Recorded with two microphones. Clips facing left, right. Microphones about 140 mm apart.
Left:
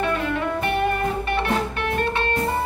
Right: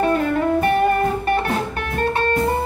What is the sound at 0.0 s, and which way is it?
Music, 40° right (ahead or behind).